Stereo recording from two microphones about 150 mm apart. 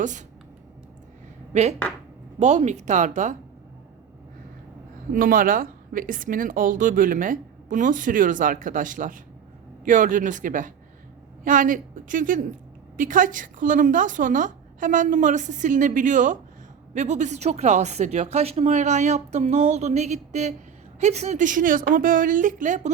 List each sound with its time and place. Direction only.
0.0 s a woman's voice: 55° right (ahead or behind)
1.5 s speech: 50° right (ahead or behind)
5.1 s a woman's voice: 70° right (ahead or behind)